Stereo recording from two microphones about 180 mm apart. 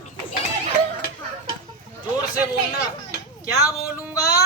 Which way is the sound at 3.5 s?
20° left (ahead or behind).